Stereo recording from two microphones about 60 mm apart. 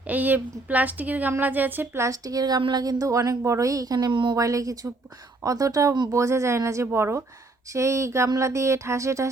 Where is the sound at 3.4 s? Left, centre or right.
Right.